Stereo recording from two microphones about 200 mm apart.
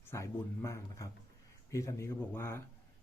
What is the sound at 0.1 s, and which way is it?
Speech, 15° left (ahead or behind).